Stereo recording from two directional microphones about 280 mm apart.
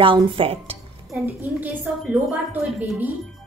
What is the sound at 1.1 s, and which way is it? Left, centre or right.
A woman's voice, centre.